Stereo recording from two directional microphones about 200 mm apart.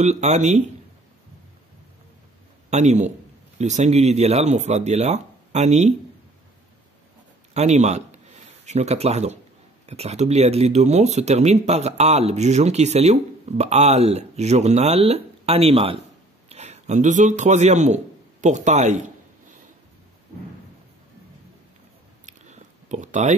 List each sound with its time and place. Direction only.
0.0 s speech: 35° right (ahead or behind)
2.7 s speech: 35° right (ahead or behind)
7.5 s a man's voice: 35° right (ahead or behind)
22.2 s a sound: 35° right (ahead or behind)